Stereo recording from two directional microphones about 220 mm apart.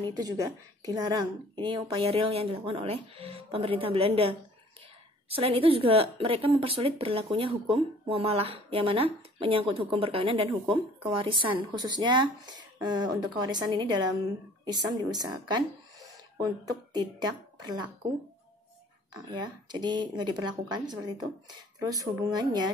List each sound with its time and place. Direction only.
0.1 s speech: 20° right (ahead or behind)
19.3 s speech: 20° right (ahead or behind)